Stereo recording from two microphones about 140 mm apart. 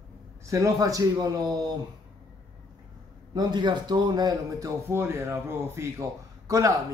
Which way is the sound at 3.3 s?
30° right (ahead or behind).